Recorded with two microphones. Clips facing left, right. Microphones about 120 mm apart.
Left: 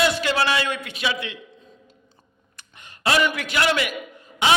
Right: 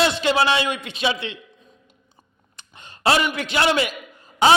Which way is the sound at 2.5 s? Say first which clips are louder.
Right 3 dB; 30° right (ahead or behind).